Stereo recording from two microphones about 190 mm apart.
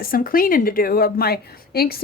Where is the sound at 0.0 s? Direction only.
50° left (ahead or behind).